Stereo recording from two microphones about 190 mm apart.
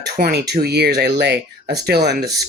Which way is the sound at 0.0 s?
60° right (ahead or behind).